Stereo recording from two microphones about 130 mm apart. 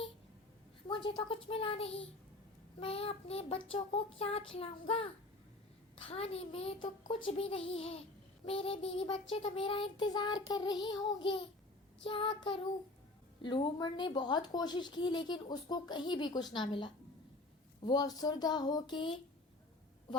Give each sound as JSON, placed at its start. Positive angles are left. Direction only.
{"t": 0.9, "sound": "a woman's voice", "side_deg": 40}
{"t": 2.8, "sound": "child singing", "side_deg": 45}
{"t": 8.4, "sound": "a woman's voice", "side_deg": 45}